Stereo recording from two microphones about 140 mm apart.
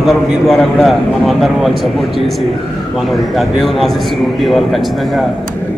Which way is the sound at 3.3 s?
Centre (ahead or behind).